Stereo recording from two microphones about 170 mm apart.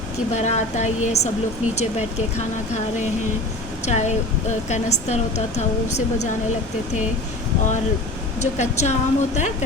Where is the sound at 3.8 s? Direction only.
40° left (ahead or behind).